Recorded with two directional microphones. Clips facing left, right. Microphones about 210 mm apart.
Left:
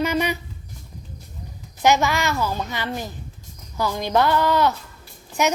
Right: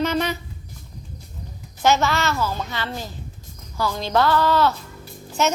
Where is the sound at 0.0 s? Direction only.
10° left (ahead or behind).